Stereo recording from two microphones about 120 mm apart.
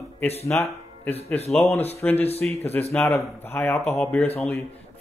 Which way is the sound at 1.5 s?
10° left (ahead or behind).